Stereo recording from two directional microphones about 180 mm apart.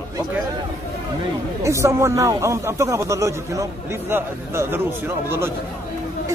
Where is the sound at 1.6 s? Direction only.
15° right (ahead or behind).